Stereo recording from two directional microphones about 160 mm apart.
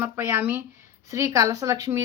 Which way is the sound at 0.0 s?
15° right (ahead or behind).